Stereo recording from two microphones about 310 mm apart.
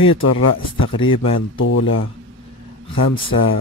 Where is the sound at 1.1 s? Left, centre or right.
Centre.